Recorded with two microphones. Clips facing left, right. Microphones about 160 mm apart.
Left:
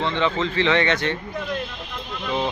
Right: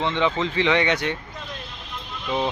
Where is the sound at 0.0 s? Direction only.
15° right (ahead or behind).